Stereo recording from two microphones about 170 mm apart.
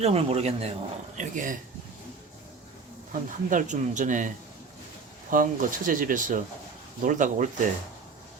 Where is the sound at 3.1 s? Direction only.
45° right (ahead or behind).